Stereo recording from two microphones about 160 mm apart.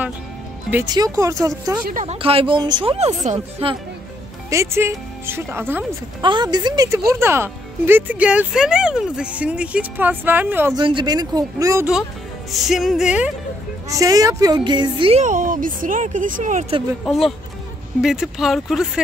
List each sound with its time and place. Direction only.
0.8 s speech: 25° right (ahead or behind)
2.0 s speech: 35° right (ahead or behind)
4.5 s speech: 15° right (ahead or behind)
6.2 s speech: 25° right (ahead or behind); by 10.7 s 10° right (ahead or behind)
10.8 s speech: 30° right (ahead or behind)
12.5 s speech: centre (ahead or behind)
13.8 s speech: 20° right (ahead or behind)
15.2 s speech: 55° right (ahead or behind)
17.0 s speech: centre (ahead or behind)